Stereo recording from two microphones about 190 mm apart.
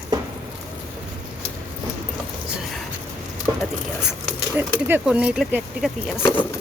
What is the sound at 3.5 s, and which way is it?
Speech, 15° right (ahead or behind).